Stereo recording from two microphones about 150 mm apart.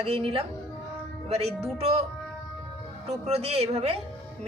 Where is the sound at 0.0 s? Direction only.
40° right (ahead or behind).